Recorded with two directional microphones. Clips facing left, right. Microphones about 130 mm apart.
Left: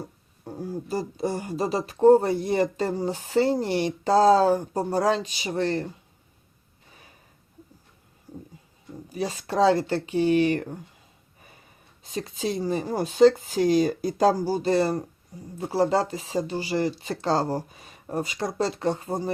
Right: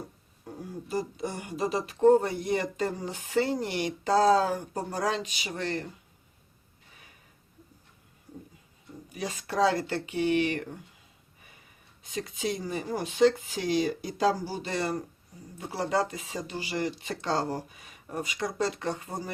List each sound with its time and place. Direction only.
0.4 s speech: 30° left (ahead or behind)
9.0 s speech: 30° left (ahead or behind)
12.0 s speech: 35° left (ahead or behind)